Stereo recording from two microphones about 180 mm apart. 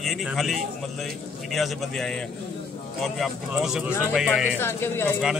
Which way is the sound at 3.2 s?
5° right (ahead or behind).